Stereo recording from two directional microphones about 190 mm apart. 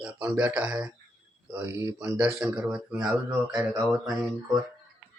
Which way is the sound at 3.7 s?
20° right (ahead or behind).